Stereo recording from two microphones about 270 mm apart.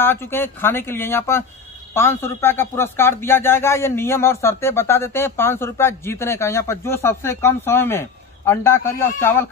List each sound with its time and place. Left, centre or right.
0.0 s speech: centre